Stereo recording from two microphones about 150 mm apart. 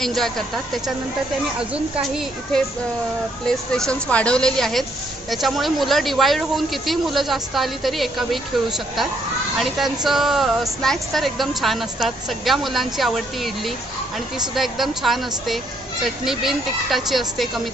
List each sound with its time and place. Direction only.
0.0 s speech: centre (ahead or behind)
9.6 s speech: centre (ahead or behind)